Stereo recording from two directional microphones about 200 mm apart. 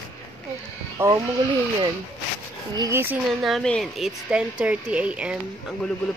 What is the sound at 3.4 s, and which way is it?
Speech, centre (ahead or behind).